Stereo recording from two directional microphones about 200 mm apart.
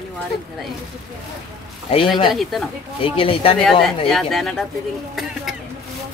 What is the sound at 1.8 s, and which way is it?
Speech, 25° left (ahead or behind).